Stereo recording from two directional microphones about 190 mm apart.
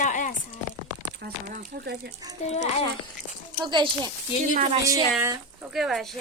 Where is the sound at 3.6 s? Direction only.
25° right (ahead or behind).